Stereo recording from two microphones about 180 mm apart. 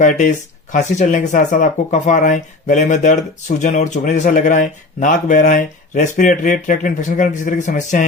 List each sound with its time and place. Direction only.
0.0 s speech: 45° left (ahead or behind)